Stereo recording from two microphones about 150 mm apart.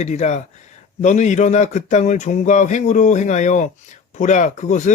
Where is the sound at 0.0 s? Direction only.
50° left (ahead or behind).